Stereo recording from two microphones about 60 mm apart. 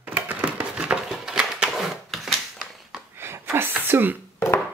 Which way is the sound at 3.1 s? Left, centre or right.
Right.